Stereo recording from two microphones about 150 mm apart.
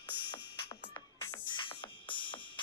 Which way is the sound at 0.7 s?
25° left (ahead or behind).